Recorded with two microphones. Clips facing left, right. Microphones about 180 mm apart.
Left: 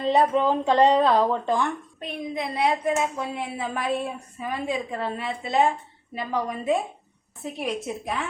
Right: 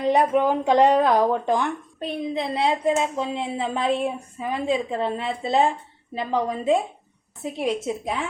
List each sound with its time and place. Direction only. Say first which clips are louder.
0.0 s speech: right 1 dB; 15° right (ahead or behind)
2.0 s a woman's voice: right 6 dB; 30° right (ahead or behind)